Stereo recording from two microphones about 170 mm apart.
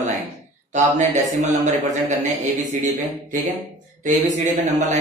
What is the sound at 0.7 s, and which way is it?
Speech, 45° right (ahead or behind).